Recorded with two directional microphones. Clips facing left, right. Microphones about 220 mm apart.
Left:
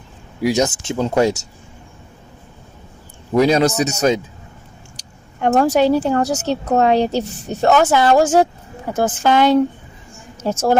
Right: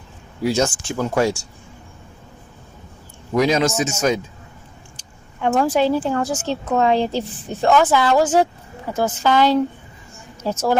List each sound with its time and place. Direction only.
0.4 s speech: 15° left (ahead or behind)
3.3 s speech: 35° left (ahead or behind)
5.5 s a woman's voice: 45° left (ahead or behind)